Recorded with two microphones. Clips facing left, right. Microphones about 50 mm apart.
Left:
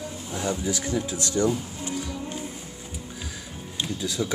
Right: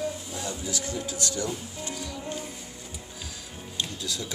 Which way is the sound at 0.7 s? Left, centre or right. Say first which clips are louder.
Left 5 dB; left.